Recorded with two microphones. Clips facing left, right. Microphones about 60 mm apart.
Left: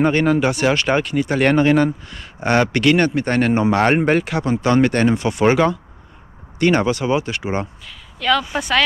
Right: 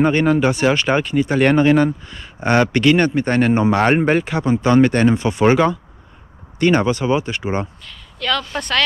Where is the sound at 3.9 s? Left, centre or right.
Left.